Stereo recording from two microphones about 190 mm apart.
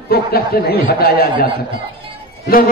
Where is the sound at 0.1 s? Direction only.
55° left (ahead or behind).